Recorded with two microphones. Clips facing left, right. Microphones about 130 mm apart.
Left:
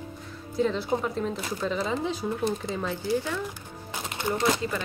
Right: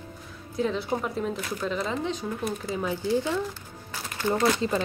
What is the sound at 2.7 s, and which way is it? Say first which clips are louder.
Speech: right 1 dB; 10° right (ahead or behind).